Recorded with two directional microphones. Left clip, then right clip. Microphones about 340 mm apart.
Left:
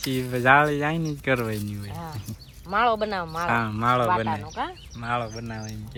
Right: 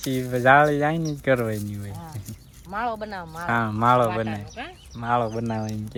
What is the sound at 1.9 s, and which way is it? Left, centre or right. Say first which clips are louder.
Speech: left 3 dB; left.